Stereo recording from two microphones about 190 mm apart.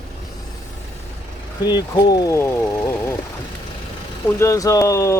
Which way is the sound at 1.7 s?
20° left (ahead or behind).